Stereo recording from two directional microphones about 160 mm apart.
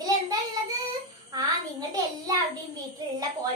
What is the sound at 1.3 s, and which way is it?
Child singing, 25° right (ahead or behind).